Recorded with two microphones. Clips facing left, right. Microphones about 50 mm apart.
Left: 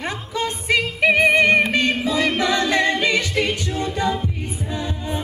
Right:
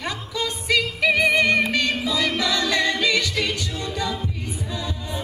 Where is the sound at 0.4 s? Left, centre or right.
Left.